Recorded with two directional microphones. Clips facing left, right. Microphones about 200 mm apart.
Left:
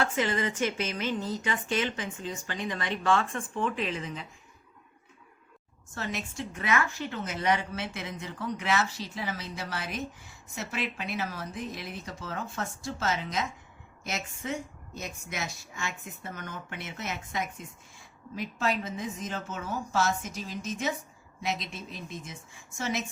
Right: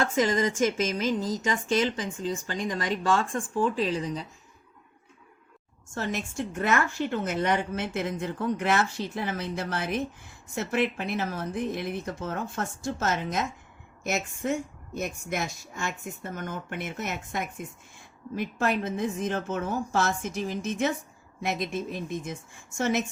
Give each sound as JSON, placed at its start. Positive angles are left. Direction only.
{"t": 0.0, "sound": "speech", "side_deg": -40}
{"t": 5.9, "sound": "a woman's voice", "side_deg": -50}